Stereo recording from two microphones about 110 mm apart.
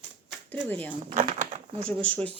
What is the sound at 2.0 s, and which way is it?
Speech, 10° left (ahead or behind).